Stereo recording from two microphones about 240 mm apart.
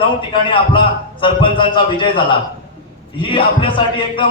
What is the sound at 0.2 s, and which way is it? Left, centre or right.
A man's voice, left.